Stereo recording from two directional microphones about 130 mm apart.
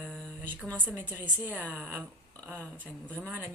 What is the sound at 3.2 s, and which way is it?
Speech, 15° right (ahead or behind).